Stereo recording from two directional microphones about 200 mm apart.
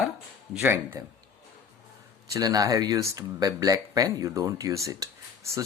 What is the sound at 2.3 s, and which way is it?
Speech, 20° right (ahead or behind).